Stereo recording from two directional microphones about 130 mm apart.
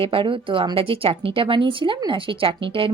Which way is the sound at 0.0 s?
45° right (ahead or behind).